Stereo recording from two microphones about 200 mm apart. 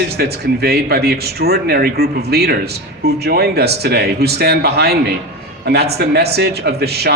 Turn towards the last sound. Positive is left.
turn(degrees=-55)  # may be behind; listen again after turning